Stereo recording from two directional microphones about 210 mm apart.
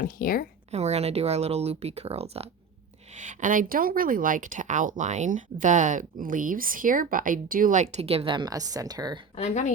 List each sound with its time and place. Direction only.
0.0 s speech: 45° left (ahead or behind)
0.7 s speech: 30° right (ahead or behind)
9.3 s speech: 35° left (ahead or behind)